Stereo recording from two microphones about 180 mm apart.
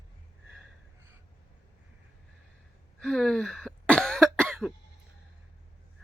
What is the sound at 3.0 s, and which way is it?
Cough, 5° left (ahead or behind).